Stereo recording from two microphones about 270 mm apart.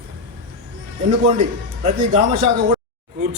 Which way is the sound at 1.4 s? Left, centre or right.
Right.